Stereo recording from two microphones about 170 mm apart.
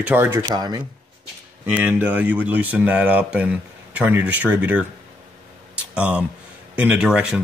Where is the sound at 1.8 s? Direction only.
10° right (ahead or behind).